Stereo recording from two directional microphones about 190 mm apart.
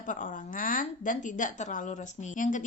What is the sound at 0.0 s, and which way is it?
A woman's voice, 45° left (ahead or behind).